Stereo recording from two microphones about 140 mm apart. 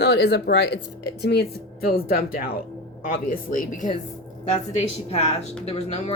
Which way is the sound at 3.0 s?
80° left.